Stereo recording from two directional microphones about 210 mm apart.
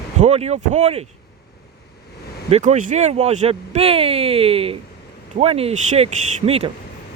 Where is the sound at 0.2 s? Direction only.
30° right (ahead or behind).